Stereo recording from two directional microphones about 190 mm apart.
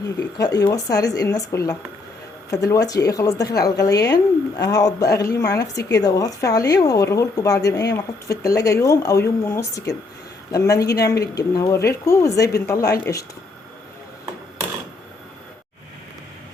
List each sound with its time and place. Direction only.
0.2 s a woman's voice: 20° left (ahead or behind)